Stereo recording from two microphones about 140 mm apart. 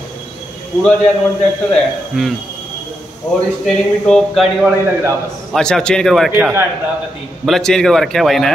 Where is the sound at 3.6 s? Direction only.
Centre (ahead or behind).